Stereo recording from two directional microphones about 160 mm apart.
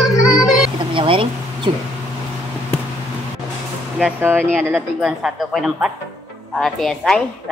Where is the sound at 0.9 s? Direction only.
35° right (ahead or behind).